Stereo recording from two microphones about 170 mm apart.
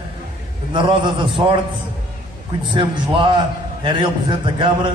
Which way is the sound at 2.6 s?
30° right (ahead or behind).